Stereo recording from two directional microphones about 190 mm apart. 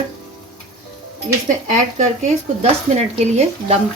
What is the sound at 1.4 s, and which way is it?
Speech, 40° right (ahead or behind).